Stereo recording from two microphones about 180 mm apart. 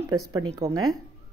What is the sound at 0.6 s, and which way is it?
Speech, 35° right (ahead or behind).